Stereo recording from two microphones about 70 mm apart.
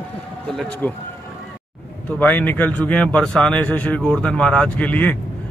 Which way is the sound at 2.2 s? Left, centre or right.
Left.